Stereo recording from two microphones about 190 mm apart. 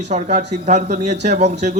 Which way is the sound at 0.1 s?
40° right (ahead or behind).